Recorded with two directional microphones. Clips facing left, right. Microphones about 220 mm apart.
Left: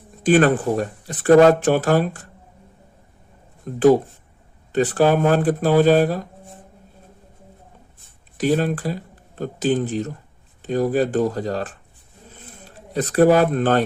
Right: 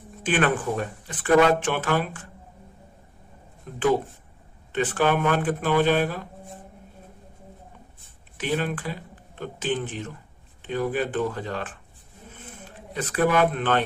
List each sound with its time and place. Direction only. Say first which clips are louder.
0.2 s speech: left 8 dB; 40° left (ahead or behind)
3.7 s speech: left 8 dB; 40° left (ahead or behind)
8.4 s speech: left 7 dB; 40° left (ahead or behind)
12.3 s a sound: right 1 dB; 35° left (ahead or behind)